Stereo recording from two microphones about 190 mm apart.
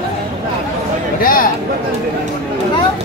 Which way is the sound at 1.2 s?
45° left (ahead or behind).